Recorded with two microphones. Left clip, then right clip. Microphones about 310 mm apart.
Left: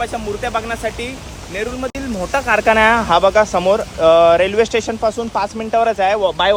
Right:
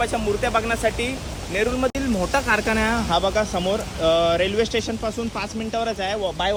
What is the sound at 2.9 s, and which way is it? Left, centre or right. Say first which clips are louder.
Speech: left 9 dB; left.